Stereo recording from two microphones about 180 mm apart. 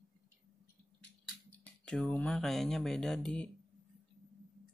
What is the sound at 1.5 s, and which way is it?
Speech, 5° left (ahead or behind).